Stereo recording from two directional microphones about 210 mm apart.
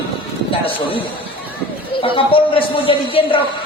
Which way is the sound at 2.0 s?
25° left (ahead or behind).